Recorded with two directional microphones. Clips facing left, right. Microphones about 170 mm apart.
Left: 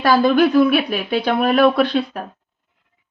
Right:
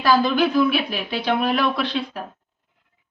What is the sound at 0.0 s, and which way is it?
Speech, 60° left (ahead or behind).